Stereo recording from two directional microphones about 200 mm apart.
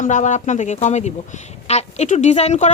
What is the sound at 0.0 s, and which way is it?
A woman's voice, 40° left (ahead or behind).